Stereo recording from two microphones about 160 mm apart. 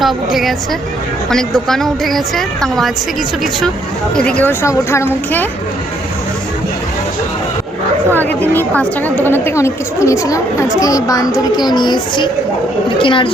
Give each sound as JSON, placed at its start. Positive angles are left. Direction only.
{"t": 0.0, "sound": "a woman's voice", "side_deg": 0}
{"t": 4.1, "sound": "speech", "side_deg": 5}
{"t": 8.5, "sound": "a woman's voice", "side_deg": 10}